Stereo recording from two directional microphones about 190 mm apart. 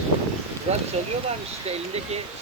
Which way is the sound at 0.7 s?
35° right (ahead or behind).